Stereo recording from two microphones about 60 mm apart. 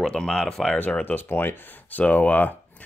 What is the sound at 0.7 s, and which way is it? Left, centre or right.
Speech, left.